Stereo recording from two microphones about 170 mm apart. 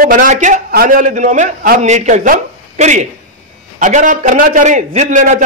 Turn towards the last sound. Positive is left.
turn(degrees=-50)  # may be behind; listen again after turning